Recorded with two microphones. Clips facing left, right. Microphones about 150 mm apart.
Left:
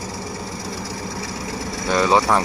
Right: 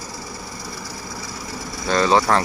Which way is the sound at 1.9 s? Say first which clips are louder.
Even; 10° left (ahead or behind).